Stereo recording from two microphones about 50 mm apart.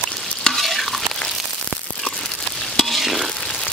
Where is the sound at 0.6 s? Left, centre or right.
Centre.